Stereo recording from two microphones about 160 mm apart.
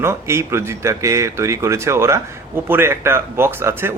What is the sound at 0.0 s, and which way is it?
Speech, 15° right (ahead or behind).